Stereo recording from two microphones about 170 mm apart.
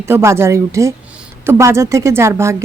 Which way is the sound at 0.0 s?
15° right (ahead or behind).